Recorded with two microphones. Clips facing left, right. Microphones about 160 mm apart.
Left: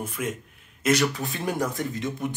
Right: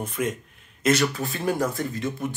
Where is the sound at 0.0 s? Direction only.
10° left (ahead or behind).